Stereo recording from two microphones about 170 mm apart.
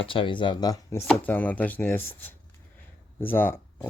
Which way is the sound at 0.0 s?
30° left (ahead or behind).